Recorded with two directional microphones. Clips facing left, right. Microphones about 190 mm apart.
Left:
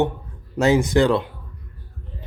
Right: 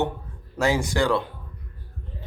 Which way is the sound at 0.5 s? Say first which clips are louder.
Left 6 dB; 20° left (ahead or behind).